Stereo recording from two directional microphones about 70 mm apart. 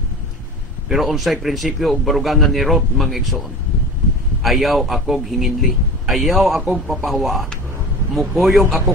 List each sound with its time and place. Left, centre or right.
0.8 s a man's voice: centre
4.4 s a man's voice: centre